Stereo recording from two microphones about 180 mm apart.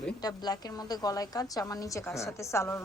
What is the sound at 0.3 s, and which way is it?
A woman's voice, 20° left (ahead or behind).